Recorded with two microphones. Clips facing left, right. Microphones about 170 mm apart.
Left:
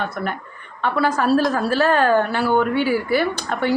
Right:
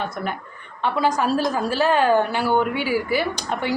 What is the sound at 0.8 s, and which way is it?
A woman's voice, 15° right (ahead or behind).